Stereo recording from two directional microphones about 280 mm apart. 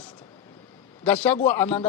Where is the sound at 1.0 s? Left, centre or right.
Centre.